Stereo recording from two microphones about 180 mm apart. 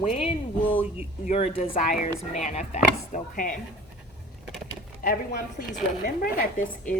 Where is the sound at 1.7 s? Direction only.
45° left (ahead or behind).